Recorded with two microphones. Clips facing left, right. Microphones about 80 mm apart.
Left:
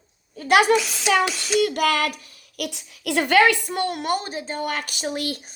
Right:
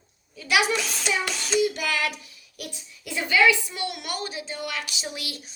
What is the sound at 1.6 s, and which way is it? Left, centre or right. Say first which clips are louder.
Child singing: left 4 dB; left.